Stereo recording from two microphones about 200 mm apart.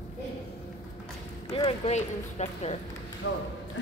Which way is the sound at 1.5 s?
30° left (ahead or behind).